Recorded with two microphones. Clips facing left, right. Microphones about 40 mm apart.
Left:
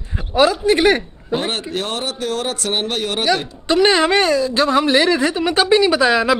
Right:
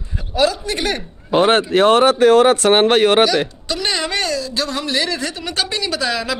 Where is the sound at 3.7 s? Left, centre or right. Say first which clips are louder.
Left 11 dB; left.